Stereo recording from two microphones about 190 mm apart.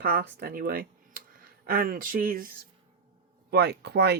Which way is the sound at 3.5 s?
60° right (ahead or behind).